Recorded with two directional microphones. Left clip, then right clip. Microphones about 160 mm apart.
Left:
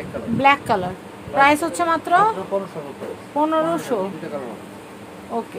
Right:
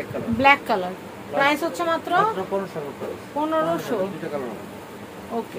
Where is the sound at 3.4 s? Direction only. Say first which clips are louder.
Left 3 dB; 45° left (ahead or behind).